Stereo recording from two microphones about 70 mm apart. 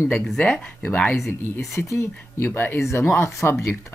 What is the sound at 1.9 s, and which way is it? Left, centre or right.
Speech, left.